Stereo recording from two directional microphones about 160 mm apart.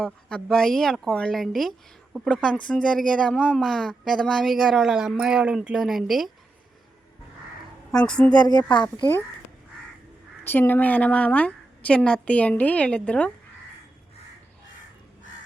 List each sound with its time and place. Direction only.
0.0 s speech: 5° left (ahead or behind)
7.9 s a woman's voice: 5° left (ahead or behind)
8.7 s speech: 30° left (ahead or behind)
10.4 s a woman's voice: 10° left (ahead or behind)